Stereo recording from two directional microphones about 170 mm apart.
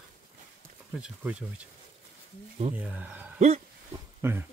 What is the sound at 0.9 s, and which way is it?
Speech, 5° right (ahead or behind).